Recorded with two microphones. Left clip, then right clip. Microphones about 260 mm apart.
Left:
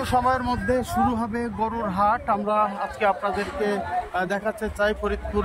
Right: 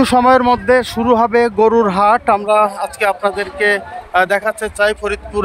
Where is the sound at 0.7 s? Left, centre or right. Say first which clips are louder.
Right 10 dB; right.